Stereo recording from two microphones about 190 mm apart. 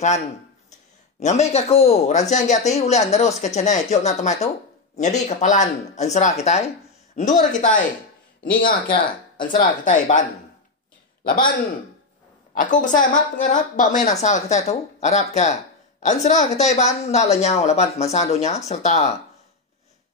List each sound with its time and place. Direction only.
1.2 s speech: 35° left (ahead or behind)
8.8 s speech: 45° left (ahead or behind)
11.2 s a woman's voice: 50° left (ahead or behind)
12.5 s a woman's voice: 45° left (ahead or behind)